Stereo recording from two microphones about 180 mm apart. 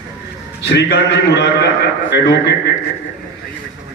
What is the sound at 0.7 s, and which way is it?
A man's voice, 70° left (ahead or behind).